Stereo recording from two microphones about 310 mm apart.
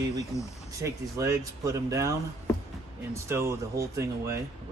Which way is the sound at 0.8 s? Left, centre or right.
Centre.